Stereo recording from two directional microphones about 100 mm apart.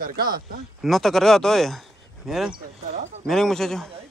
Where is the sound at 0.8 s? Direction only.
Centre (ahead or behind).